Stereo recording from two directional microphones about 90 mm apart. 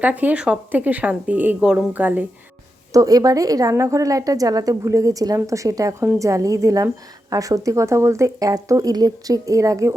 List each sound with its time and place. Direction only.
0.0 s speech: 20° right (ahead or behind)
2.9 s a woman's voice: 40° right (ahead or behind)